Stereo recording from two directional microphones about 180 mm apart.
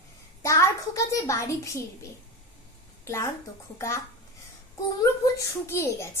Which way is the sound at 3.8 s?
15° left (ahead or behind).